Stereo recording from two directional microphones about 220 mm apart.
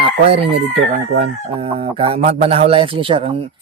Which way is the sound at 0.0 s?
25° right (ahead or behind).